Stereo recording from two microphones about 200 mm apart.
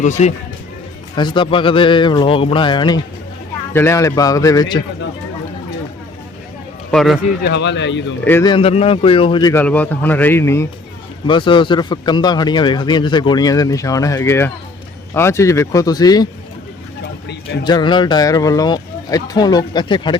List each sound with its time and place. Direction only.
0.0 s speech: 35° left (ahead or behind)
1.1 s a man's voice: 25° left (ahead or behind)
3.7 s speech: 10° left (ahead or behind)
6.9 s speech: centre (ahead or behind)
7.4 s speech: 60° left (ahead or behind)
8.2 s speech: 10° left (ahead or behind)
8.4 s speech: 25° left (ahead or behind)
11.3 s a man's voice: 25° left (ahead or behind)
17.6 s a man's voice: 20° left (ahead or behind)